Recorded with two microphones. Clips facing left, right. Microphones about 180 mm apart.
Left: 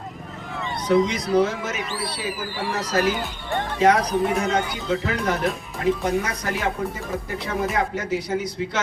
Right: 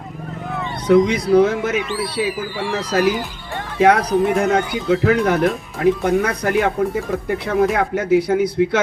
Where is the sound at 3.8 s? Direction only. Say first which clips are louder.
Right 5 dB; 55° right (ahead or behind).